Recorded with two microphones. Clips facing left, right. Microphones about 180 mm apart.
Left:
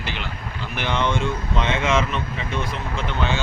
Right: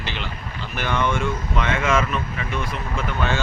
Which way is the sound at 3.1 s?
20° left (ahead or behind).